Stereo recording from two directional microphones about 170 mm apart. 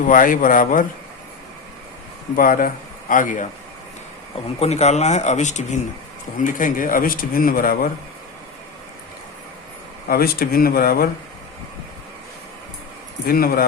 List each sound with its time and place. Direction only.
0.1 s speech: 55° left (ahead or behind)
2.3 s a man's voice: 55° left (ahead or behind)
4.6 s speech: 40° left (ahead or behind); by 7.9 s 60° left (ahead or behind)
10.1 s speech: 60° left (ahead or behind)
13.2 s speech: 60° left (ahead or behind)